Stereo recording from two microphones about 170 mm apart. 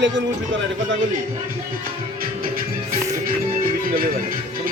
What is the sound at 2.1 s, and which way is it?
Music, 60° right (ahead or behind).